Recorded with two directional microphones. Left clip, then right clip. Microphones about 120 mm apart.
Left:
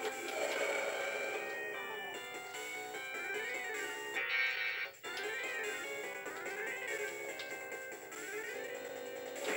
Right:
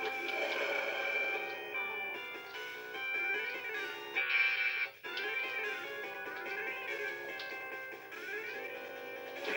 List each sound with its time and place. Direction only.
0.0 s music: 35° left (ahead or behind)
3.1 s music: 30° left (ahead or behind)